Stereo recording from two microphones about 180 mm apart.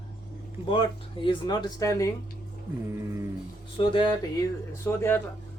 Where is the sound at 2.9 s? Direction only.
15° right (ahead or behind).